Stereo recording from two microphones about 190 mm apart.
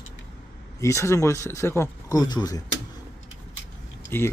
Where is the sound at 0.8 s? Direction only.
15° left (ahead or behind).